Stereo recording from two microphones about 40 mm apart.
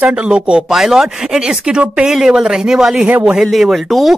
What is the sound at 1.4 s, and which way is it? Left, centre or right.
Speech, right.